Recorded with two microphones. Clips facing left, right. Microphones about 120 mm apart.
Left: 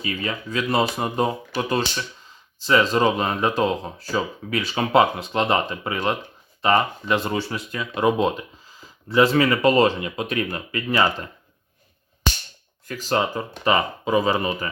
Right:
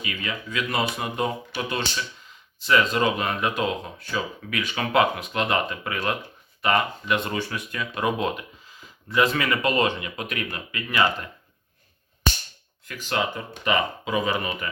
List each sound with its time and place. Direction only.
0.0 s speech: 35° left (ahead or behind)
12.8 s speech: 35° left (ahead or behind)